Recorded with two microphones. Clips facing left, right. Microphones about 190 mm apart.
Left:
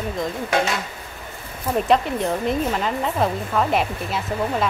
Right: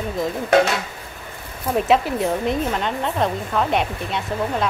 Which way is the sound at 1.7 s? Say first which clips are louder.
Right 1 dB; centre (ahead or behind).